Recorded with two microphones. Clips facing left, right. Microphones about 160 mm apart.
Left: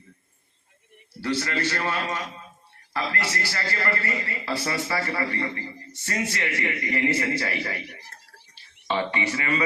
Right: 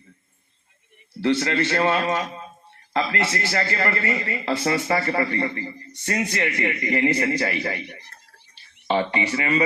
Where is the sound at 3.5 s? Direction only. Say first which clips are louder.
Right 4 dB; 65° right (ahead or behind).